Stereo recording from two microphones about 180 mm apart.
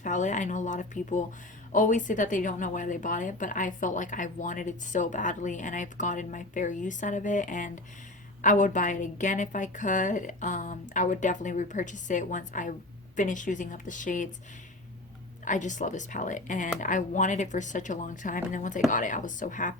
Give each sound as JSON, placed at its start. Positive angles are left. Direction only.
{"t": 0.0, "sound": "speech", "side_deg": 45}
{"t": 15.4, "sound": "speech", "side_deg": 45}